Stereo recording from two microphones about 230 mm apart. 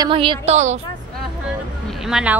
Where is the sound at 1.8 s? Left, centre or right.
Centre.